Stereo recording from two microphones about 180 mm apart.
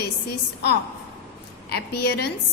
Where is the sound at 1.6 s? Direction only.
65° left (ahead or behind).